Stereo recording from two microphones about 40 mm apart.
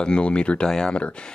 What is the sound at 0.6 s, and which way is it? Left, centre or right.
Speech, centre.